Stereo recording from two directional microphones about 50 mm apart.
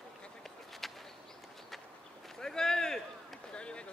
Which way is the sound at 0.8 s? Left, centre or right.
Centre.